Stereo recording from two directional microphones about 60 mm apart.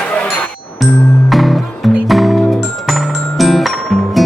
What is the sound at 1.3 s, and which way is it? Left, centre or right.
Music, centre.